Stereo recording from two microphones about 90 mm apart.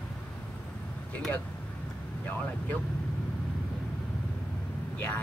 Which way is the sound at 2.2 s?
15° left (ahead or behind).